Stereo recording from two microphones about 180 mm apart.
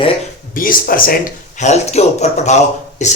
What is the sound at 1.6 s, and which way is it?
Speech, 40° left (ahead or behind).